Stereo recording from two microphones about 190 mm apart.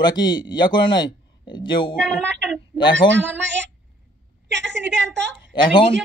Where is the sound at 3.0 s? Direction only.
25° left (ahead or behind).